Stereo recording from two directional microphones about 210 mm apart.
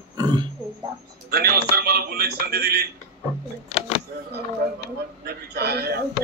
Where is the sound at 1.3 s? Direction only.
50° right (ahead or behind).